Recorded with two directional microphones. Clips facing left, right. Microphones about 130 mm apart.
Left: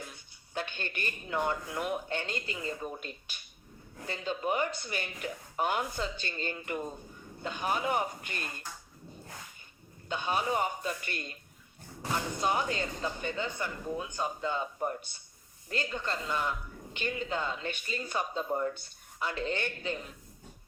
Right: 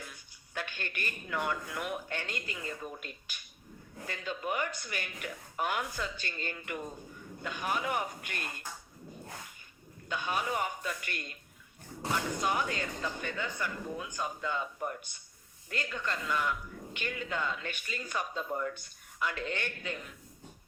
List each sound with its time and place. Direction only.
0.1 s speech: 30° left (ahead or behind)
10.1 s speech: 30° left (ahead or behind)
12.4 s speech: 30° left (ahead or behind)